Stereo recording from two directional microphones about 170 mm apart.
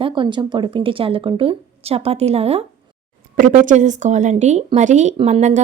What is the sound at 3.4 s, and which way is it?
Speech, 50° right (ahead or behind).